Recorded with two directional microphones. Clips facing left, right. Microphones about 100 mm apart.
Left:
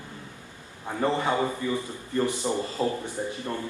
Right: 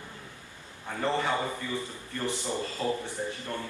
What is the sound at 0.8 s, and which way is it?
A man's voice, 20° left (ahead or behind).